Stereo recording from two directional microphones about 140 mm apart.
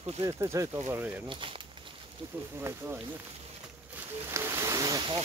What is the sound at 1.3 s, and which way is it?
Speech, 40° right (ahead or behind).